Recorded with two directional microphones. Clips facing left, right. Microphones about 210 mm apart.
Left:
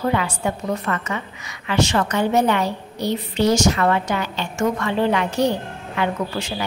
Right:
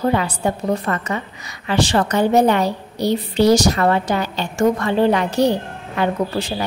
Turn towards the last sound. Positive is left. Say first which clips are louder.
# right 4 dB
turn(degrees=-35)  # may be behind; listen again after turning